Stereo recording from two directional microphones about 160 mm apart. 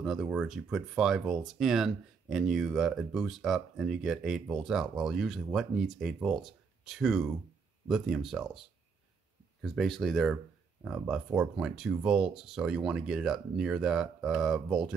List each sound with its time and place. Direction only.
0.0 s speech: centre (ahead or behind)
9.6 s speech: centre (ahead or behind)